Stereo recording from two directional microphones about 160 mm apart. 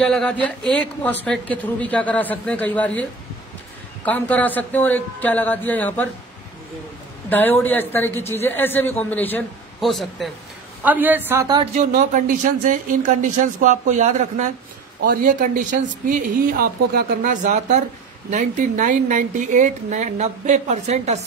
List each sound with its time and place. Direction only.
0.0 s a man's voice: 5° left (ahead or behind)
7.2 s a man's voice: 10° left (ahead or behind)
10.8 s a woman's voice: 10° right (ahead or behind)
11.9 s a woman's voice: 55° right (ahead or behind)
15.0 s a woman's voice: 60° right (ahead or behind); by 21.2 s 45° right (ahead or behind)